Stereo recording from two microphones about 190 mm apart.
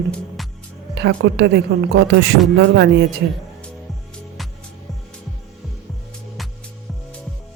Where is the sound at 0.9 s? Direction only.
65° right (ahead or behind).